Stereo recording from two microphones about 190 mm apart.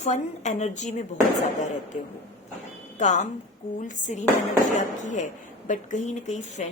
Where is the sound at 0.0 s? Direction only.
35° left (ahead or behind).